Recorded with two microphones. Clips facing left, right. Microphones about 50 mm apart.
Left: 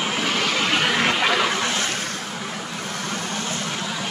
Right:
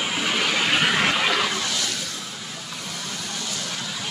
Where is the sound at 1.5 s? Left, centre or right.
Left.